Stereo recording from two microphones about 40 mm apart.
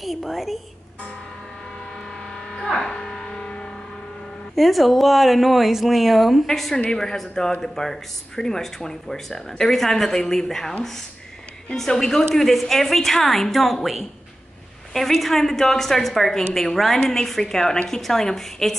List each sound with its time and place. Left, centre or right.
0.0 s speech: centre
2.6 s a sound: centre
4.6 s a woman's voice: centre
11.7 s a woman's voice: centre
15.0 s a woman's voice: centre